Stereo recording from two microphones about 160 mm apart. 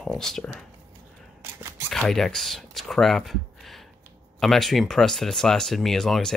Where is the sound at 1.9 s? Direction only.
5° left (ahead or behind).